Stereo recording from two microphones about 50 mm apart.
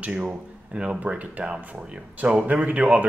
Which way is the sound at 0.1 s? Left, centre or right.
Right.